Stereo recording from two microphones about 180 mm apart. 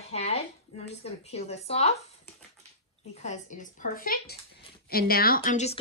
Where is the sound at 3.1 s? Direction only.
40° left (ahead or behind).